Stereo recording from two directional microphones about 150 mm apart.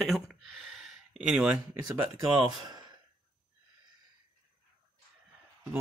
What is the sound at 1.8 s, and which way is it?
Speech, 25° right (ahead or behind).